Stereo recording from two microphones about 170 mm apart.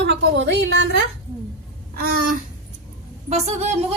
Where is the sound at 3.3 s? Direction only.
40° right (ahead or behind).